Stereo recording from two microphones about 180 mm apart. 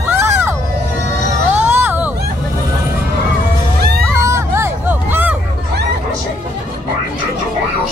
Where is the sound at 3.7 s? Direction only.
60° right (ahead or behind).